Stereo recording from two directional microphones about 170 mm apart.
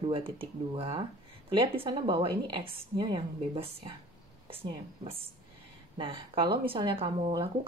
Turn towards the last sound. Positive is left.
turn(degrees=-30)  # may be behind; listen again after turning